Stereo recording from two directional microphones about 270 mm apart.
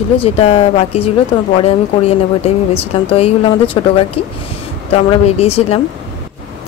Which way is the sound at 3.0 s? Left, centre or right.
Left.